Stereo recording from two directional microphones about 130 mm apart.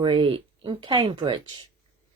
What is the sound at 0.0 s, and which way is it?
Speech, 40° right (ahead or behind).